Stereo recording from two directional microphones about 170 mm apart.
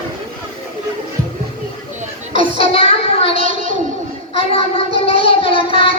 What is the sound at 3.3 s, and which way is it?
Child singing, 50° right (ahead or behind).